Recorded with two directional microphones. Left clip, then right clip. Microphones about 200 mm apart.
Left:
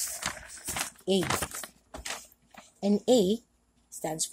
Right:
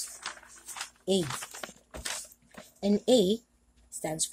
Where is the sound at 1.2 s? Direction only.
40° left (ahead or behind).